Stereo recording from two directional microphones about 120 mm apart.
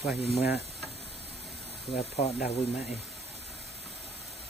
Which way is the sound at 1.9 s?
60° left (ahead or behind).